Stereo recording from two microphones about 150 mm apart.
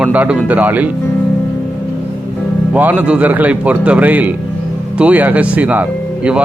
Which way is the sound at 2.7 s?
10° right (ahead or behind).